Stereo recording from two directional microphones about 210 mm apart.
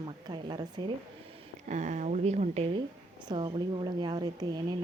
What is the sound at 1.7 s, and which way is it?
A woman's voice, 35° right (ahead or behind).